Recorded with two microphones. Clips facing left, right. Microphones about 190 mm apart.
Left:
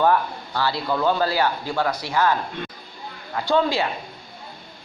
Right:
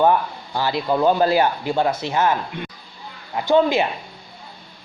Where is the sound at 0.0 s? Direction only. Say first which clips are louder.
Right 2 dB; 15° right (ahead or behind).